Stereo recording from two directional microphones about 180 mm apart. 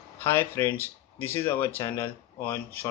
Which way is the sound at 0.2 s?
15° left (ahead or behind).